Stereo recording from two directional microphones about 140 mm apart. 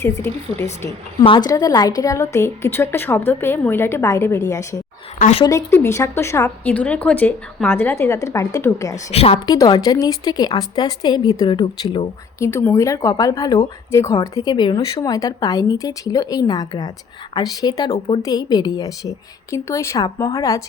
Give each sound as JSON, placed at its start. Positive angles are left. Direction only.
{"t": 0.0, "sound": "speech", "side_deg": 20}
{"t": 1.2, "sound": "speech", "side_deg": 40}
{"t": 1.5, "sound": "a woman's voice", "side_deg": 25}
{"t": 9.1, "sound": "a woman's voice", "side_deg": 45}
{"t": 9.5, "sound": "speech", "side_deg": 30}
{"t": 12.5, "sound": "speech", "side_deg": 15}